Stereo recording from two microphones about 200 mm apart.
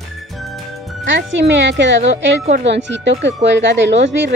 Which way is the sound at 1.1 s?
65° right (ahead or behind).